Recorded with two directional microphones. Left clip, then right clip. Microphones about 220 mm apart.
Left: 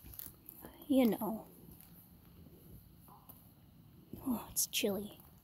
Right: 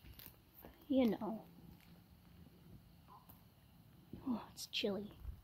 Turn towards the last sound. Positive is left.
turn(degrees=20)  # may be behind; listen again after turning